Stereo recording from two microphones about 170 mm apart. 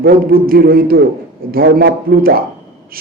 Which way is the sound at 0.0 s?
60° right (ahead or behind).